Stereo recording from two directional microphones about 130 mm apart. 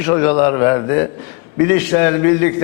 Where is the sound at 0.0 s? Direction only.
20° left (ahead or behind).